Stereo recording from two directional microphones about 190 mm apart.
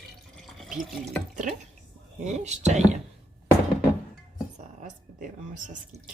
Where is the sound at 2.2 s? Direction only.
35° right (ahead or behind).